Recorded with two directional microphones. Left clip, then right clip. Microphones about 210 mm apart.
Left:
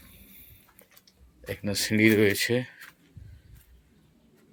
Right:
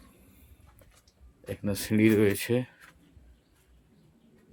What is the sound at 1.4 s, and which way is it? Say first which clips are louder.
Speech: left 3 dB; 10° right (ahead or behind).